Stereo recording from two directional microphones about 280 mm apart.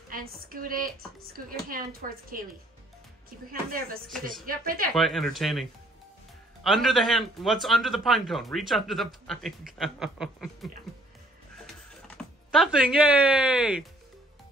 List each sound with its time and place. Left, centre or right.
0.1 s speech: right
4.5 s speech: right
4.9 s speech: centre
12.2 s speech: centre